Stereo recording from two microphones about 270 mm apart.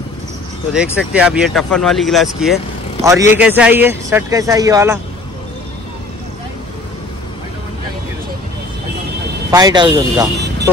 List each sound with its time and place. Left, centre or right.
0.9 s speech: centre
9.5 s speech: centre